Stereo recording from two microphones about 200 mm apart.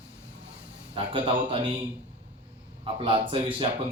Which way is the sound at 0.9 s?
25° right (ahead or behind).